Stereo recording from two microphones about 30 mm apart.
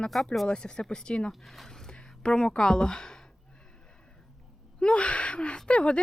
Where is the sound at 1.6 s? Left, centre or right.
Centre.